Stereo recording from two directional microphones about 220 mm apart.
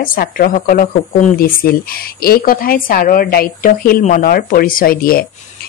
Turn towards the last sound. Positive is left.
turn(degrees=40)  # may be behind; listen again after turning